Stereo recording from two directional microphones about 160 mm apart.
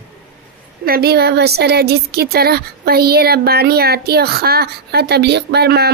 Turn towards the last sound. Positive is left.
turn(degrees=-90)